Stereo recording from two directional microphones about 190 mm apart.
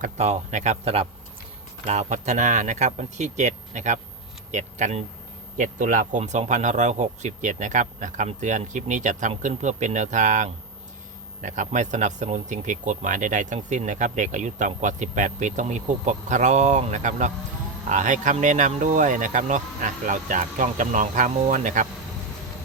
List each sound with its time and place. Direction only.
0.0 s speech: 35° right (ahead or behind)